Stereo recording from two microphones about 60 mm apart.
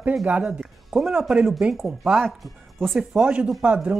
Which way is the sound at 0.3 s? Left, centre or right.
Right.